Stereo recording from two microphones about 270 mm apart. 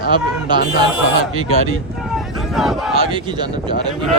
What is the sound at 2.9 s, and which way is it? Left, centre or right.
Speech, centre.